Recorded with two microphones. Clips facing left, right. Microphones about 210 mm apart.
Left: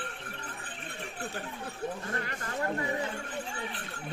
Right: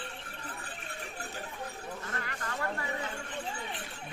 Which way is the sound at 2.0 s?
25° left (ahead or behind).